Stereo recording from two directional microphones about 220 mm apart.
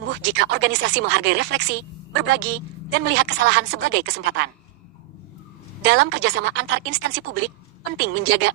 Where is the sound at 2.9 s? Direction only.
50° right (ahead or behind).